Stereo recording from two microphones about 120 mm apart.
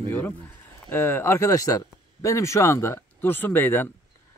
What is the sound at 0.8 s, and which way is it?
Speech, 20° left (ahead or behind).